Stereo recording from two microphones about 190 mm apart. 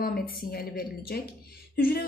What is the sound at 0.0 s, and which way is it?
A woman's voice, 50° left (ahead or behind).